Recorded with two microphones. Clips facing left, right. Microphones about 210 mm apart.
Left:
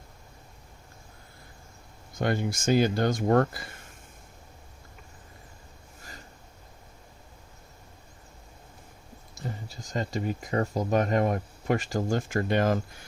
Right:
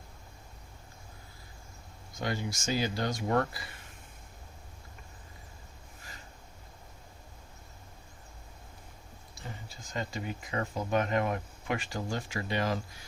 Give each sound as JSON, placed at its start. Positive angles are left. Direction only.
{"t": 2.1, "sound": "speech", "side_deg": 55}
{"t": 9.3, "sound": "speech", "side_deg": 40}